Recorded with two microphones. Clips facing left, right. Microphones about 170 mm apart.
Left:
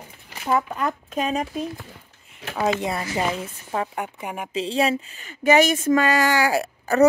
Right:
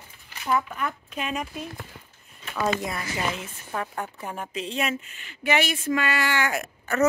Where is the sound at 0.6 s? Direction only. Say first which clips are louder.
Left 5 dB; 40° left (ahead or behind).